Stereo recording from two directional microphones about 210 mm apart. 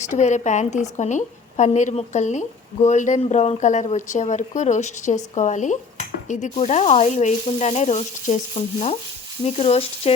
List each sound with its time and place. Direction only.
0.1 s a woman's voice: 35° left (ahead or behind)